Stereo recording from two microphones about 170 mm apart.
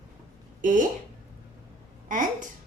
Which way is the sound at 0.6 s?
50° right (ahead or behind).